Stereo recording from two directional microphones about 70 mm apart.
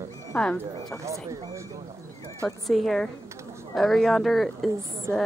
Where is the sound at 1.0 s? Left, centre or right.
Right.